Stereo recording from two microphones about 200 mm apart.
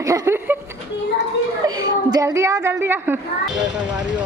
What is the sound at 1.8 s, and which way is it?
A woman's voice, 15° right (ahead or behind).